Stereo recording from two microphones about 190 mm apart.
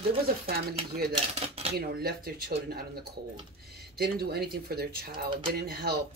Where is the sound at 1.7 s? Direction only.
55° right (ahead or behind).